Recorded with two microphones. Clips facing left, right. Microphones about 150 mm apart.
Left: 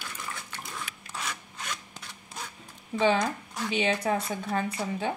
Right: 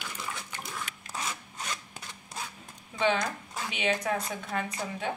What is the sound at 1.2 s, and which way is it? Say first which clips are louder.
Rub: right 1 dB; 30° right (ahead or behind).